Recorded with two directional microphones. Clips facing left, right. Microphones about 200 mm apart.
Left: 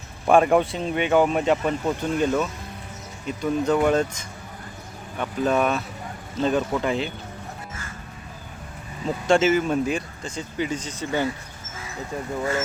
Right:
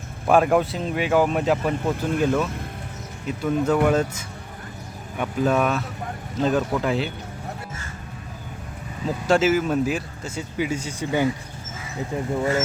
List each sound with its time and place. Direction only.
0.3 s speech: centre (ahead or behind)
9.0 s speech: 5° right (ahead or behind); by 12.3 s 20° right (ahead or behind)